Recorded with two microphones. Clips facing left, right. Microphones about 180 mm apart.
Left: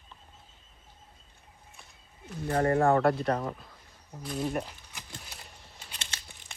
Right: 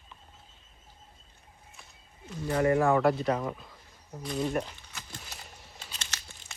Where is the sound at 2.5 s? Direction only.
50° left (ahead or behind).